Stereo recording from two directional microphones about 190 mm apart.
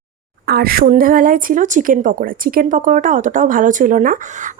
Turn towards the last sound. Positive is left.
turn(degrees=-40)  # may be behind; listen again after turning